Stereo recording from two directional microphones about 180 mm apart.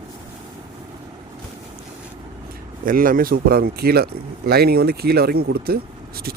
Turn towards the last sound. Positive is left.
turn(degrees=-55)  # may be behind; listen again after turning